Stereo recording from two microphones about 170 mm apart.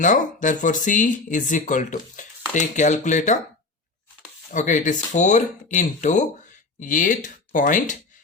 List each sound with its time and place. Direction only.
0.0 s speech: 50° left (ahead or behind)
4.5 s speech: 45° left (ahead or behind)